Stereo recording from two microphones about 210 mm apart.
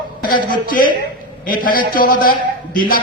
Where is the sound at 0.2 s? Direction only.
40° left (ahead or behind).